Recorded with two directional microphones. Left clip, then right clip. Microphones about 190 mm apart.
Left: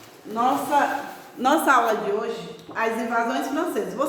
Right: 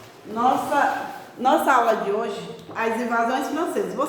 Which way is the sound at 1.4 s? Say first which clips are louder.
Right 1 dB; 40° left (ahead or behind).